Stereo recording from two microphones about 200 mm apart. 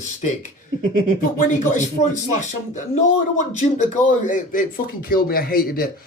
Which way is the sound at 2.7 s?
40° left (ahead or behind).